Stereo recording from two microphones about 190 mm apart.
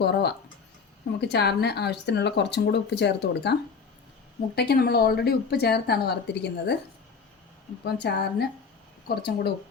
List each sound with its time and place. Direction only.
0.0 s a woman's voice: 60° left (ahead or behind)
7.9 s a woman's voice: 60° left (ahead or behind)